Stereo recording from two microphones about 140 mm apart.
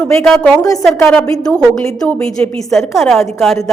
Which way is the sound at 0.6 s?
25° left (ahead or behind).